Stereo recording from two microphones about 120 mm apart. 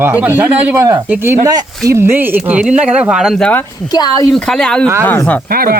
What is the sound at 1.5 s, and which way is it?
Speech, 30° right (ahead or behind).